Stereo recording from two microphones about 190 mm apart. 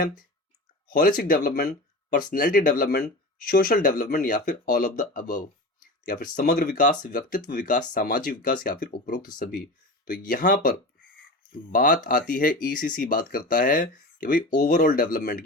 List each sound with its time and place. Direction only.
0.9 s speech: 50° left (ahead or behind)